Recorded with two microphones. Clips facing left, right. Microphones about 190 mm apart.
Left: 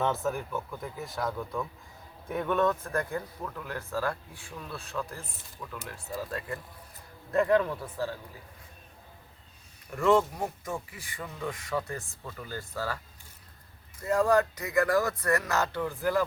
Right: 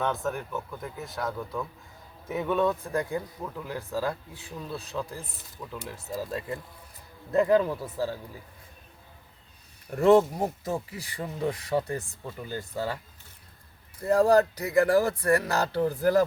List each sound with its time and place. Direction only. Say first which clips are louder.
0.0 s speech: even; centre (ahead or behind); by 8.1 s 30° right (ahead or behind)
10.3 s speech: right 5 dB; 35° right (ahead or behind)
14.0 s speech: right 4 dB; 35° right (ahead or behind)